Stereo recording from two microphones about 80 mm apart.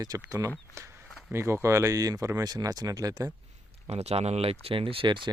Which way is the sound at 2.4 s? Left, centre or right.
Right.